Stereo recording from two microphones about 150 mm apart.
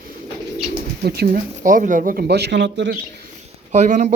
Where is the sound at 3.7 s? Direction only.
55° right (ahead or behind).